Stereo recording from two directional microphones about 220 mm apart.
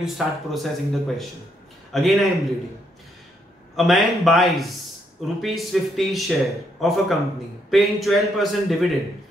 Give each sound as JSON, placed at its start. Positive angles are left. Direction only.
{"t": 0.0, "sound": "a man's voice", "side_deg": 0}
{"t": 3.7, "sound": "a man's voice", "side_deg": 0}